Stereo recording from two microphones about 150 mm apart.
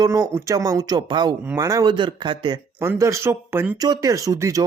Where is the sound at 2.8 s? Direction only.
20° right (ahead or behind).